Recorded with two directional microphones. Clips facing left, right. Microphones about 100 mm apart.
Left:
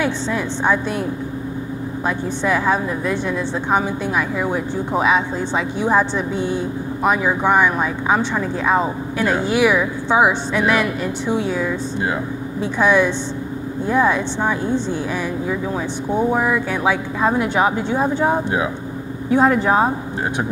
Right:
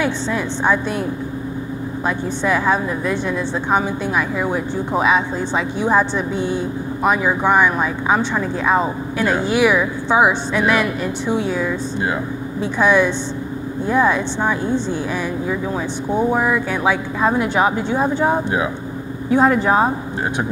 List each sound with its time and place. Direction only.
0.0 s speech: 20° right (ahead or behind)
2.0 s speech: 20° right (ahead or behind)
16.3 s speech: 20° right (ahead or behind)